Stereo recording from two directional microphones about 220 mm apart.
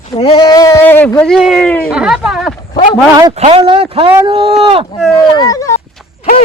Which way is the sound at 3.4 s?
25° right (ahead or behind).